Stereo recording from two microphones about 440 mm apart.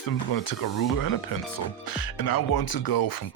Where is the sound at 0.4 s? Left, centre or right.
Left.